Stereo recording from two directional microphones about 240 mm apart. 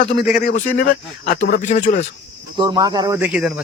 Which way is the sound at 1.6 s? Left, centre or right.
Left.